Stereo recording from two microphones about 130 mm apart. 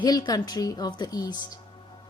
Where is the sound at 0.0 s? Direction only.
30° left (ahead or behind).